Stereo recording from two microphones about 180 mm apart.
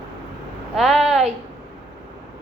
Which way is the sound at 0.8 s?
Centre (ahead or behind).